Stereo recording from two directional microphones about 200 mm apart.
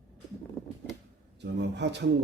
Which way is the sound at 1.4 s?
60° right (ahead or behind).